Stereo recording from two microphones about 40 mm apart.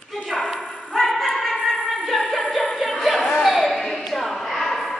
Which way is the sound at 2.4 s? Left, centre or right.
Centre.